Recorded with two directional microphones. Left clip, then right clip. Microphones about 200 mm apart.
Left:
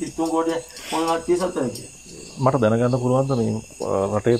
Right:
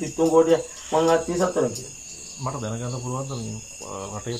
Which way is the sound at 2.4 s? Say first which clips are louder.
Left 13 dB; 45° left (ahead or behind).